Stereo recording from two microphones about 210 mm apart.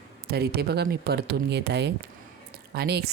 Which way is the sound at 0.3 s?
50° right (ahead or behind).